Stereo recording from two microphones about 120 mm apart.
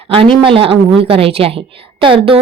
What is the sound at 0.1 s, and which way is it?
A woman's voice, 45° right (ahead or behind).